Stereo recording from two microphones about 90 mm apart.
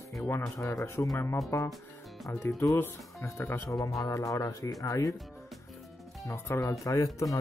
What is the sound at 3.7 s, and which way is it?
Speech, 40° left (ahead or behind).